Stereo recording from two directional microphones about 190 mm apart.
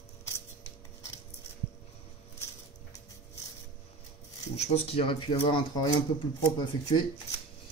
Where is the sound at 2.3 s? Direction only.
15° left (ahead or behind).